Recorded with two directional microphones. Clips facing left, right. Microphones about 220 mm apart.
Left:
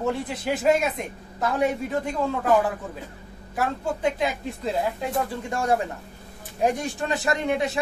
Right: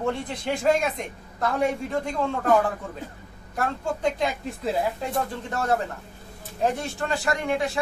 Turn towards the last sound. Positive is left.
turn(degrees=20)  # may be behind; listen again after turning